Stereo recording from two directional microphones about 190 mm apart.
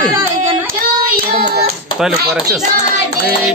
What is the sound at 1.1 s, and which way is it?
Child singing, 50° right (ahead or behind).